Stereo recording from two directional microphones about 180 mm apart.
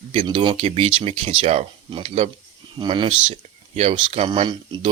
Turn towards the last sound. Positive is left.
turn(degrees=-30)  # may be behind; listen again after turning